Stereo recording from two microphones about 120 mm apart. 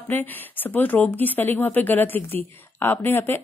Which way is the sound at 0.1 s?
15° left (ahead or behind).